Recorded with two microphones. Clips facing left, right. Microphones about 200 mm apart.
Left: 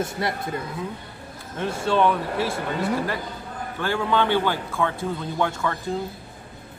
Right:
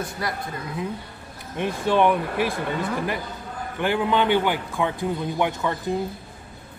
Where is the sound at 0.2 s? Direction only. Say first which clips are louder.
Left 2 dB; 25° left (ahead or behind).